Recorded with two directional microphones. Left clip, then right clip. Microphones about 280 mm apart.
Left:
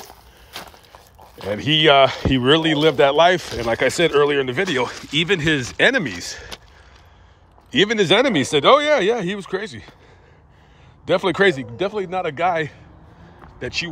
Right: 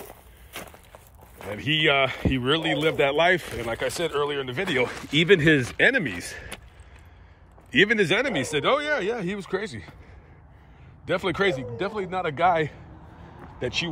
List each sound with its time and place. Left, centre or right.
0.1 s walk: centre
1.5 s speech: centre
7.7 s speech: centre
11.1 s speech: centre